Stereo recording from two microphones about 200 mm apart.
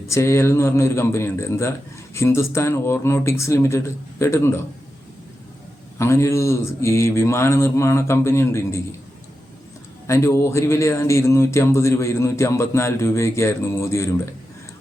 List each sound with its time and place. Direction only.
0.1 s speech: 15° left (ahead or behind)
6.0 s speech: 15° left (ahead or behind)
10.1 s speech: 15° left (ahead or behind)